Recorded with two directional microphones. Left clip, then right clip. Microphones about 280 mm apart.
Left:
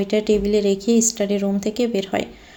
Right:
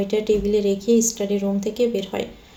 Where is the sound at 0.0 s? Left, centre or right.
Left.